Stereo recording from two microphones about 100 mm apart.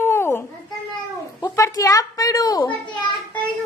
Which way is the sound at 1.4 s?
35° left (ahead or behind).